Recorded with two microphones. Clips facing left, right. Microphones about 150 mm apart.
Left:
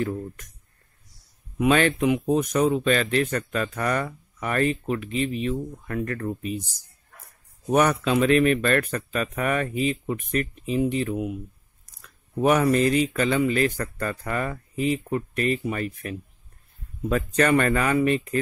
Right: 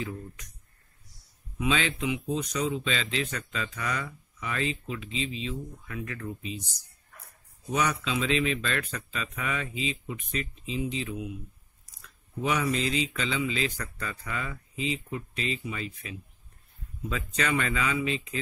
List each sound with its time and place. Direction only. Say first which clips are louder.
0.0 s speech: left 8 dB; 50° left (ahead or behind)
1.6 s speech: left 8 dB; 55° left (ahead or behind)
7.7 s speech: left 8 dB; 55° left (ahead or behind)